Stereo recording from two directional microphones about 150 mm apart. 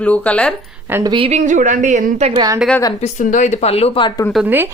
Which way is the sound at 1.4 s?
55° right (ahead or behind).